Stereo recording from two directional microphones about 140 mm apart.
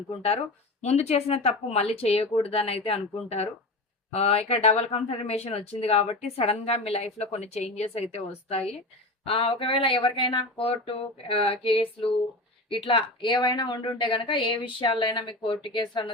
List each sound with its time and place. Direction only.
0.8 s speech: 50° left (ahead or behind); by 16.1 s 35° left (ahead or behind)